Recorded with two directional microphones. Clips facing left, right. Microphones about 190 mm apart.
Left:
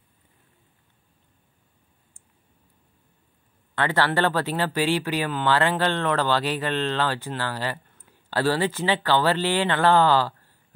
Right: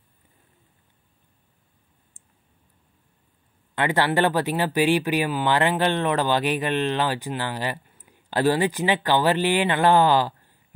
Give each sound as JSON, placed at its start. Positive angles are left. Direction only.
{"t": 3.7, "sound": "speech", "side_deg": -15}